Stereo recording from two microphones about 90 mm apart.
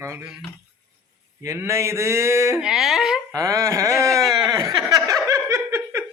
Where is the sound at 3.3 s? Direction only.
35° right (ahead or behind).